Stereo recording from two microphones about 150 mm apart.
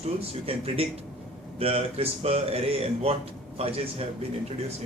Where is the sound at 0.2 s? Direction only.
40° right (ahead or behind).